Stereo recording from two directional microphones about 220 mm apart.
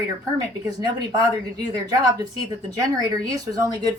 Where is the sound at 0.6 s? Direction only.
20° right (ahead or behind).